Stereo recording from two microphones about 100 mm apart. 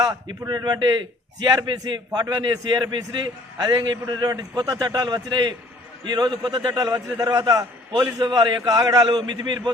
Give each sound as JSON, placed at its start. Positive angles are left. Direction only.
{"t": 0.0, "sound": "a man's voice", "side_deg": -45}
{"t": 6.7, "sound": "a man's voice", "side_deg": -40}